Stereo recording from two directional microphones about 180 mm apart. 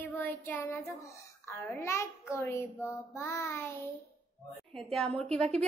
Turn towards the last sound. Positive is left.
turn(degrees=5)  # may be behind; listen again after turning